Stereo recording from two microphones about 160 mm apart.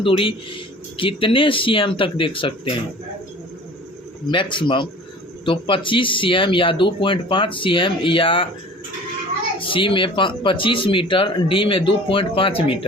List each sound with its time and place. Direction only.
0.0 s speech: 35° left (ahead or behind)
4.3 s speech: 30° left (ahead or behind)
9.6 s speech: 35° left (ahead or behind)